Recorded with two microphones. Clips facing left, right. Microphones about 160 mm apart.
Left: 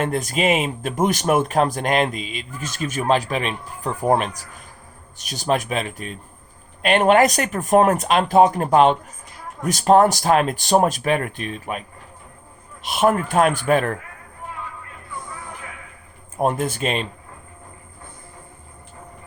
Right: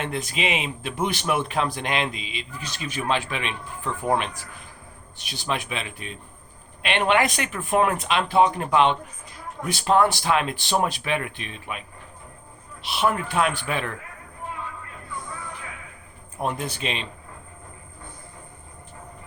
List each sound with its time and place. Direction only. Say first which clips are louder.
0.0 s speech: left 6 dB; 45° left (ahead or behind)
16.4 s speech: left 7 dB; 45° left (ahead or behind)